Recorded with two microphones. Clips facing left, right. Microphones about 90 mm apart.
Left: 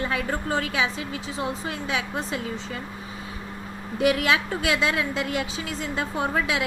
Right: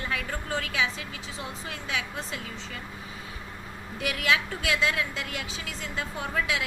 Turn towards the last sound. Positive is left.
turn(degrees=25)  # may be behind; listen again after turning